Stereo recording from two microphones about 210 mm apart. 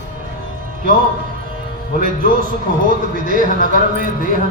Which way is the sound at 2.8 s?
40° right (ahead or behind).